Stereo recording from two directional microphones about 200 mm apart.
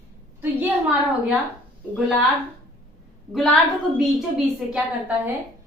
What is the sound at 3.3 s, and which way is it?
A woman's voice, centre (ahead or behind).